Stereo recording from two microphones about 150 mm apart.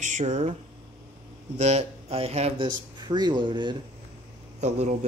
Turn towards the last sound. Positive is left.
turn(degrees=-50)  # may be behind; listen again after turning